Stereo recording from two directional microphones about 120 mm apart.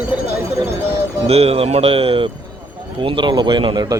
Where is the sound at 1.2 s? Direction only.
60° right (ahead or behind).